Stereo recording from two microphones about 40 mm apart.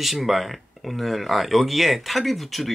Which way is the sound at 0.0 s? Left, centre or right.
Centre.